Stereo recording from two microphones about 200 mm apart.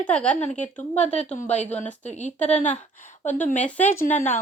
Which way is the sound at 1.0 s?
35° left (ahead or behind).